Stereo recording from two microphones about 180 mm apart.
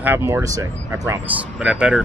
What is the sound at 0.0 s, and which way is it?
Speech, 10° right (ahead or behind).